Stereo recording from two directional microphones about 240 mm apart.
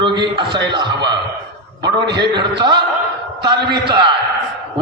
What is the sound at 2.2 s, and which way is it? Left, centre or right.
Speech, centre.